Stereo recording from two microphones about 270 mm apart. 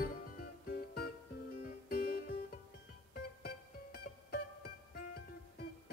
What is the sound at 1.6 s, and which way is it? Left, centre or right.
Music, left.